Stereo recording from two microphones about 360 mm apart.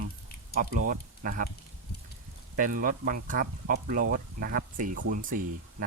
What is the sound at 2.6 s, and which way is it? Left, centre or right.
Speech, right.